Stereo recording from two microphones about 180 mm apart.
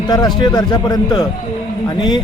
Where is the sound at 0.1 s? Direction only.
20° left (ahead or behind).